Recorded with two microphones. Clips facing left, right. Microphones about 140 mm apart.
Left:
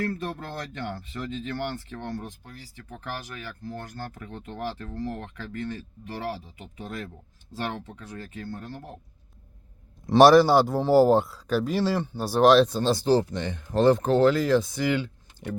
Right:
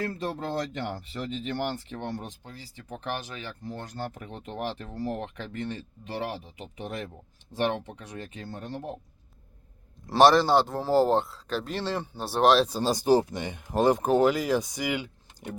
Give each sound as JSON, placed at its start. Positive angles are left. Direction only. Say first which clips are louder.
{"t": 0.0, "sound": "speech", "louder": "left 1 dB", "side_deg": -20}
{"t": 10.2, "sound": "speech", "louder": "left 4 dB", "side_deg": 5}
{"t": 12.7, "sound": "speech", "louder": "even", "side_deg": -10}